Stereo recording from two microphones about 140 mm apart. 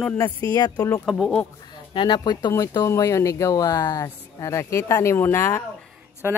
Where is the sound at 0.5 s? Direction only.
30° left (ahead or behind).